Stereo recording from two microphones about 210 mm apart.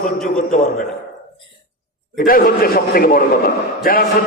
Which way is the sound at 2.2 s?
45° left (ahead or behind).